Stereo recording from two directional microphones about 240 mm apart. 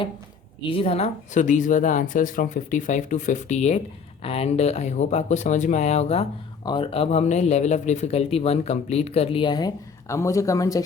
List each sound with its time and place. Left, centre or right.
0.7 s speech: left